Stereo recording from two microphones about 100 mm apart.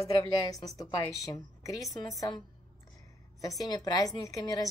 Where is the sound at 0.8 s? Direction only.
35° left (ahead or behind).